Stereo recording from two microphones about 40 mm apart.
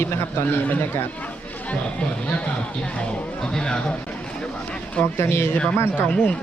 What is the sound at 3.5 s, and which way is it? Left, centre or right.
Speech, centre.